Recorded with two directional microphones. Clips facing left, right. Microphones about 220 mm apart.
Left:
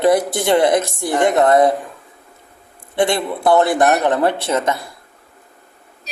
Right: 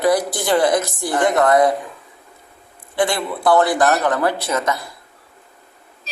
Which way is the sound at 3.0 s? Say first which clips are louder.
Left 2 dB; 25° left (ahead or behind).